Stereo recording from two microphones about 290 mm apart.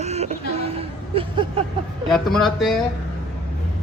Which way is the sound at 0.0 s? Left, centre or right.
Right.